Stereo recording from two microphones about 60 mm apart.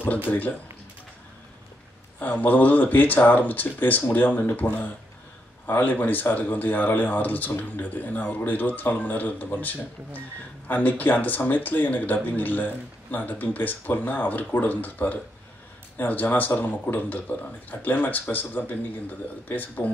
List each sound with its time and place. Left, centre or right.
0.3 s speech: left
2.1 s speech: left